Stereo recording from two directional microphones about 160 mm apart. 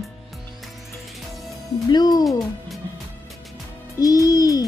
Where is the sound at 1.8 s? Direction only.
25° left (ahead or behind).